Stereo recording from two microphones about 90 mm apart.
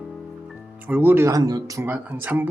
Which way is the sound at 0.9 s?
25° right (ahead or behind).